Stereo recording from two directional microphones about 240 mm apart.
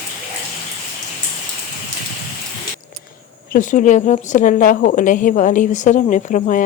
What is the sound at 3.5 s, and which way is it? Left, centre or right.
A woman's voice, left.